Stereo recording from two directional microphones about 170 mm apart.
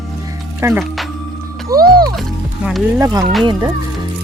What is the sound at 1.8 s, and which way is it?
Music, 60° right (ahead or behind).